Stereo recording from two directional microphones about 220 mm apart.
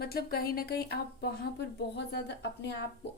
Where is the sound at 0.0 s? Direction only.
45° left (ahead or behind).